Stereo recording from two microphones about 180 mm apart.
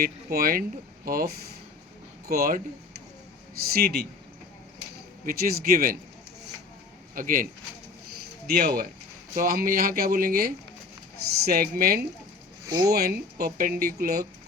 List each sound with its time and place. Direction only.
0.0 s speech: 55° right (ahead or behind)
2.3 s speech: 55° right (ahead or behind)
3.6 s speech: 60° right (ahead or behind)
5.2 s speech: 55° right (ahead or behind)
7.2 s speech: 50° right (ahead or behind)
8.4 s speech: 55° right (ahead or behind)
12.6 s speech: 20° right (ahead or behind)
12.9 s speech: 55° right (ahead or behind)